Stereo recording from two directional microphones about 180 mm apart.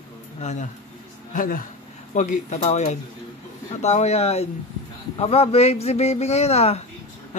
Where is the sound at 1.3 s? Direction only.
50° left (ahead or behind).